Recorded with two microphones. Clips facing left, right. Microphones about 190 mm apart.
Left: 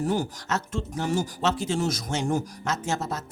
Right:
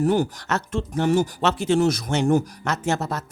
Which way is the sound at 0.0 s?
60° right (ahead or behind).